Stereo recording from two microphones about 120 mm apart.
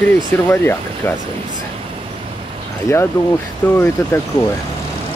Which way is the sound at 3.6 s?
20° left (ahead or behind).